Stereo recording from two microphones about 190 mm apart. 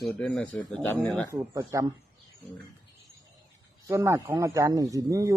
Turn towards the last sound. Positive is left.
turn(degrees=-15)  # may be behind; listen again after turning